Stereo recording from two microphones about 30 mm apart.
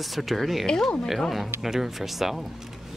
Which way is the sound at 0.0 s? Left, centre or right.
Centre.